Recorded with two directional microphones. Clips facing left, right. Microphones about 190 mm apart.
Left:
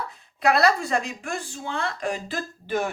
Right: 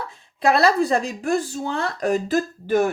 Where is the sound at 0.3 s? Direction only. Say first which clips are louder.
Right 3 dB; 30° right (ahead or behind).